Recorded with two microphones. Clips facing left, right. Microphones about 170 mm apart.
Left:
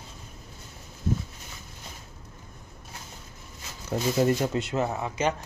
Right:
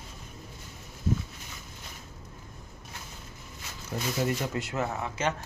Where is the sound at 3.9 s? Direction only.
40° left (ahead or behind).